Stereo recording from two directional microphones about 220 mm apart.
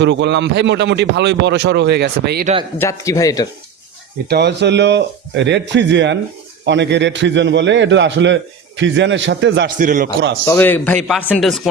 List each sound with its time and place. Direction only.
0.0 s speech: 55° right (ahead or behind)
2.7 s a man's voice: 10° left (ahead or behind)
4.3 s a man's voice: 50° right (ahead or behind)
9.7 s a man's voice: 40° right (ahead or behind)
10.4 s a man's voice: 10° left (ahead or behind)